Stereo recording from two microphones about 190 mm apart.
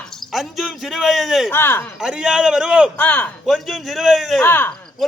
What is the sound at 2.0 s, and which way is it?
Speech, 5° right (ahead or behind).